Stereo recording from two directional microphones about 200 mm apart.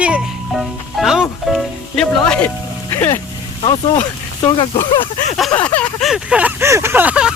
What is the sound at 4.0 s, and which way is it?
Speech, 25° left (ahead or behind).